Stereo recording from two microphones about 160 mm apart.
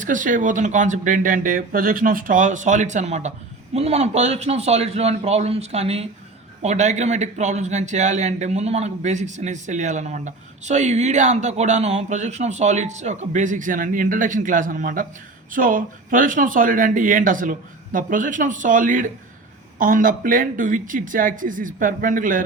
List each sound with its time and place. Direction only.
0.0 s a man's voice: 55° right (ahead or behind)